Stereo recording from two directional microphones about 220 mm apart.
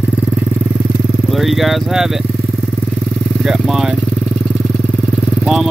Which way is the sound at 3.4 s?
Centre (ahead or behind).